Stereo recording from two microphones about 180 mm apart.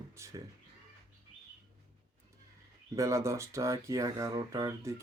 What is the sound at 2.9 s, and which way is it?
Speech, 15° right (ahead or behind).